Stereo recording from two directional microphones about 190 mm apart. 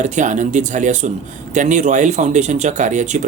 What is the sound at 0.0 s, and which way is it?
Speech, 40° right (ahead or behind).